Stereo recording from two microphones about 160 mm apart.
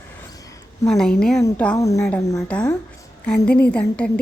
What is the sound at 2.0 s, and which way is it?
Speech, 5° left (ahead or behind).